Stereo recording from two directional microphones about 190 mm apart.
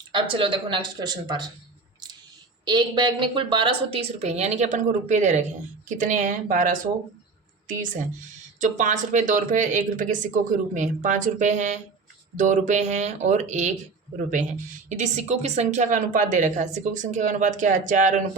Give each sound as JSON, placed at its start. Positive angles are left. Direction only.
{"t": 0.1, "sound": "speech", "side_deg": -25}
{"t": 2.6, "sound": "speech", "side_deg": -25}
{"t": 8.5, "sound": "speech", "side_deg": -40}
{"t": 14.8, "sound": "speech", "side_deg": -40}